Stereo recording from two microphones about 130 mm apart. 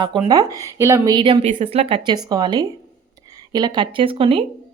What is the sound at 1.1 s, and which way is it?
Speech, 40° right (ahead or behind).